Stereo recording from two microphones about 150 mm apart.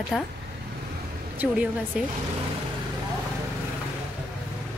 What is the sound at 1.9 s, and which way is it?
Speech, 5° right (ahead or behind).